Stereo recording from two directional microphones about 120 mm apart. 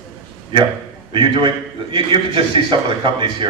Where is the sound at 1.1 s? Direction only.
45° right (ahead or behind).